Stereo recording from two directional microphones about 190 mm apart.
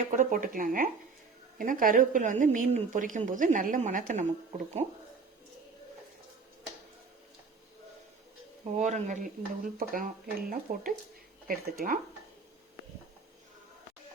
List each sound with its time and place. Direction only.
0.0 s a woman's voice: 45° right (ahead or behind)
8.7 s a woman's voice: 40° right (ahead or behind)